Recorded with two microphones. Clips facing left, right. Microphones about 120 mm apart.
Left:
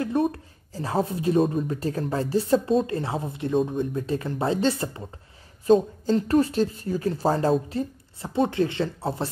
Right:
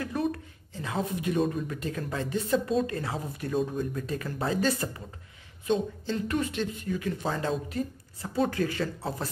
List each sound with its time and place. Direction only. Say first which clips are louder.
0.0 s speech: left 6 dB; 30° left (ahead or behind)
5.7 s speech: left 9 dB; 40° left (ahead or behind)
8.2 s speech: left 4 dB; 25° left (ahead or behind)